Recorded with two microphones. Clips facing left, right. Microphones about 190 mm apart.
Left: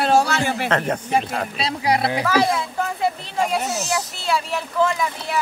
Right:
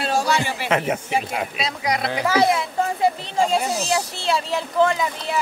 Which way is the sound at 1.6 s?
30° left (ahead or behind).